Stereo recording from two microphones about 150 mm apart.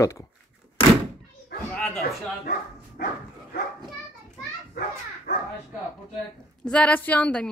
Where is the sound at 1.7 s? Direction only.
5° left (ahead or behind).